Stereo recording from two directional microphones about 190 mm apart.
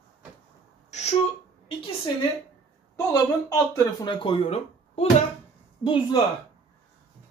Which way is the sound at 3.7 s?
25° left (ahead or behind).